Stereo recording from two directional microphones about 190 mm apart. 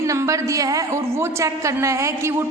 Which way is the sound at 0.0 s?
15° right (ahead or behind).